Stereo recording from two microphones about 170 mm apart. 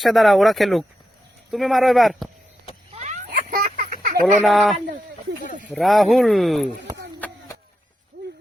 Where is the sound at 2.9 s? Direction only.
45° right (ahead or behind).